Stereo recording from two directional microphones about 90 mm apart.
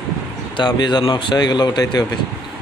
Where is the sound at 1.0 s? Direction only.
65° left (ahead or behind); by 2.0 s 50° left (ahead or behind).